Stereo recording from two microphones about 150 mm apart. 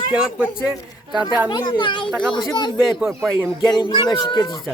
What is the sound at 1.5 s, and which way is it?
A child's voice, 30° left (ahead or behind).